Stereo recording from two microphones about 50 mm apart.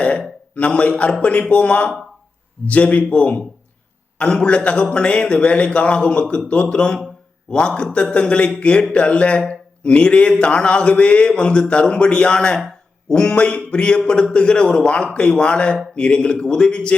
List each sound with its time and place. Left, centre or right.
0.0 s a man's voice: left
8.1 s speech: left